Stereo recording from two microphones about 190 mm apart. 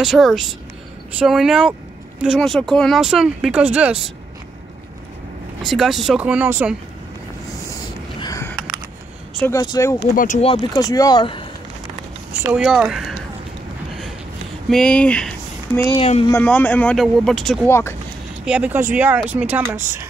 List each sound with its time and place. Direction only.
0.0 s speech: centre (ahead or behind)
5.6 s speech: centre (ahead or behind)
8.2 s a sound: 15° left (ahead or behind)
9.5 s speech: 20° left (ahead or behind)
10.1 s speech: 40° left (ahead or behind)
10.7 s speech: 20° left (ahead or behind)
12.5 s speech: 5° right (ahead or behind)
14.7 s speech: 5° left (ahead or behind)
16.0 s speech: 30° left (ahead or behind)
16.3 s speech: 10° left (ahead or behind)
17.6 s speech: 10° left (ahead or behind)
18.4 s speech: 5° right (ahead or behind)